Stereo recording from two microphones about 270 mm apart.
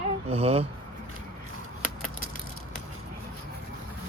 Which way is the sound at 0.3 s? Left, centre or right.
Right.